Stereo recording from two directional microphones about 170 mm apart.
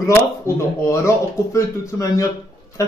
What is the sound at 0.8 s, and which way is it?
Speech, 15° left (ahead or behind).